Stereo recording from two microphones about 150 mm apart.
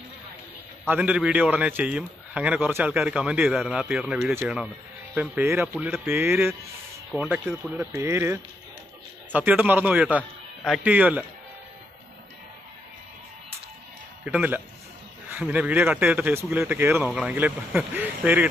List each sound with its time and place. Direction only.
0.8 s a man's voice: 10° right (ahead or behind)
14.2 s a man's voice: 10° right (ahead or behind)